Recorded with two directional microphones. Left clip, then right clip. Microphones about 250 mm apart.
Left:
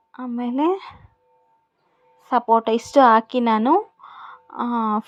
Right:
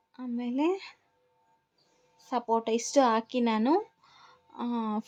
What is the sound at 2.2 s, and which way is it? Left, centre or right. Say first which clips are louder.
Speech: left 11 dB; centre.